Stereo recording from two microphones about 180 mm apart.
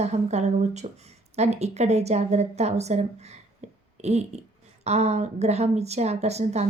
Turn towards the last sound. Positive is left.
turn(degrees=-35)  # may be behind; listen again after turning